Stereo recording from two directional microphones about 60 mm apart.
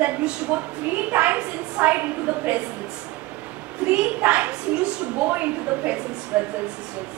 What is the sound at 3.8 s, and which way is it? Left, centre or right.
A woman's voice, right.